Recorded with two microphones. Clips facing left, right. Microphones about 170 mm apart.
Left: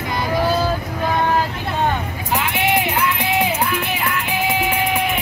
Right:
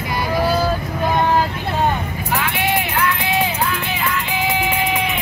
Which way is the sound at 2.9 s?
15° left (ahead or behind).